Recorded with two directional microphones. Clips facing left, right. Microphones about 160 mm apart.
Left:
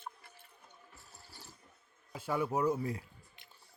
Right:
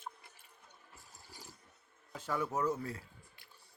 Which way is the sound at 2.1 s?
10° left (ahead or behind).